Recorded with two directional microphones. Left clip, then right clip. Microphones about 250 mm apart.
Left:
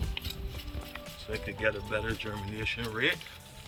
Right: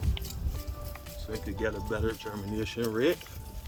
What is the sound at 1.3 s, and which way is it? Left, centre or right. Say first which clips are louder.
Speech: left 2 dB; right.